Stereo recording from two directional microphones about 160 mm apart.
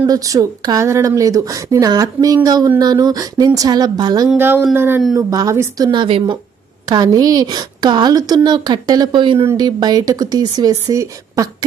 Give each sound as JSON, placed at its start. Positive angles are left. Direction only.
{"t": 0.1, "sound": "speech", "side_deg": -20}
{"t": 4.3, "sound": "speech", "side_deg": -15}